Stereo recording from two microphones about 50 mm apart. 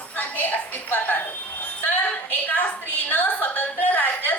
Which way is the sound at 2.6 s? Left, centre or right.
Left.